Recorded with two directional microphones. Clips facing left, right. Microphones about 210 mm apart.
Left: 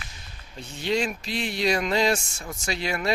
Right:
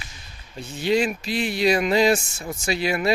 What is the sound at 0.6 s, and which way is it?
Speech, 5° right (ahead or behind).